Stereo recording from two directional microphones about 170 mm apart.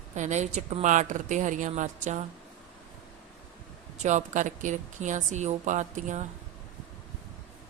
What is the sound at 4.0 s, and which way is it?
A woman's voice, 45° right (ahead or behind).